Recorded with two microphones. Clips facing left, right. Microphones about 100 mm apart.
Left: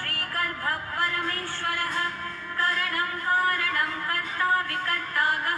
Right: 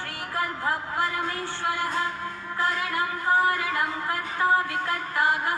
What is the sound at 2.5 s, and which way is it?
Music, 20° right (ahead or behind).